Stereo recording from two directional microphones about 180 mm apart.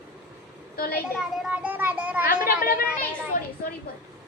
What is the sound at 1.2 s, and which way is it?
A child's voice, 5° right (ahead or behind).